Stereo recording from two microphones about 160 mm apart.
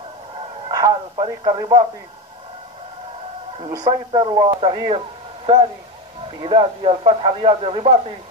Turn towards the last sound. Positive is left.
turn(degrees=-35)  # may be behind; listen again after turning